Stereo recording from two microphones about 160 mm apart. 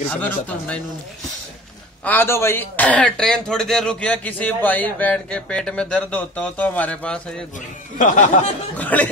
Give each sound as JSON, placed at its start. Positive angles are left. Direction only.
{"t": 0.1, "sound": "speech", "side_deg": 10}
{"t": 2.0, "sound": "speech", "side_deg": 15}
{"t": 8.0, "sound": "speech", "side_deg": 50}
{"t": 8.7, "sound": "speech", "side_deg": 10}